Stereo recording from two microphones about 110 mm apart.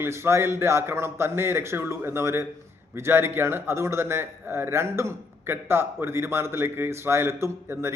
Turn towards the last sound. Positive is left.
turn(degrees=-25)  # may be behind; listen again after turning